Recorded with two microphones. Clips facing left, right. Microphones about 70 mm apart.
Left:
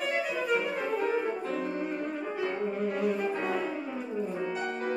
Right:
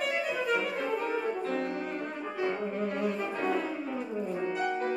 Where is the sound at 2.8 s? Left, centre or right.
Centre.